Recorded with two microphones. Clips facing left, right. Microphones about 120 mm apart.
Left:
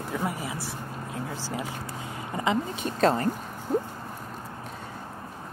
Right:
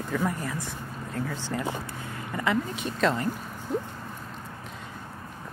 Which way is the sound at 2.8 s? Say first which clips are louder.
Left 4 dB; 40° left (ahead or behind).